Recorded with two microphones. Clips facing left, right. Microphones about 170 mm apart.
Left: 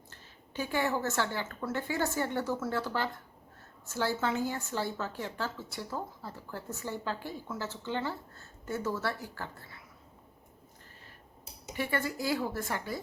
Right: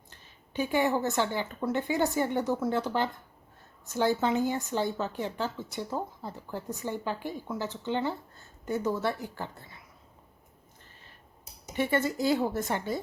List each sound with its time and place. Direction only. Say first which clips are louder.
0.1 s a woman's voice: right 5 dB; 15° right (ahead or behind)
11.7 s a woman's voice: right 5 dB; 25° right (ahead or behind)